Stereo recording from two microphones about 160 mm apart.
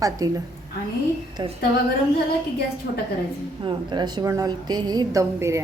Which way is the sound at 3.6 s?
30° right (ahead or behind).